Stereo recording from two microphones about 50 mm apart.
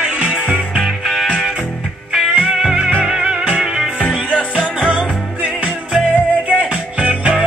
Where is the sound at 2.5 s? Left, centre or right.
Centre.